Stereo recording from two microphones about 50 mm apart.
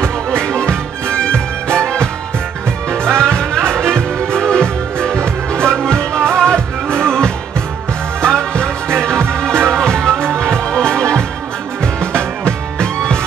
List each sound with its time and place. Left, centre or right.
0.4 s music: centre
8.2 s music: centre